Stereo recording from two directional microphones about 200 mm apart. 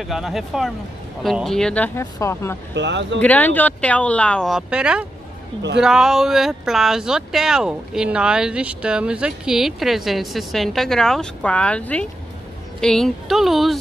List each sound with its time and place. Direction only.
0.0 s speech: centre (ahead or behind); by 2.5 s 15° left (ahead or behind)
2.7 s speech: 60° right (ahead or behind)
3.2 s speech: 10° left (ahead or behind)